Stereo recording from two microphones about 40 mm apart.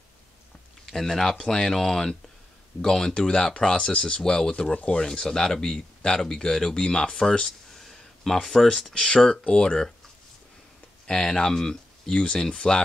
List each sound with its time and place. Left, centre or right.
0.9 s speech: centre
7.7 s a sound: centre
8.6 s speech: centre
11.1 s speech: centre